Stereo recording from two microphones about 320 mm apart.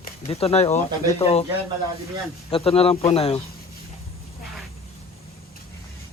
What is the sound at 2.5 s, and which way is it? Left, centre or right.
Speech, centre.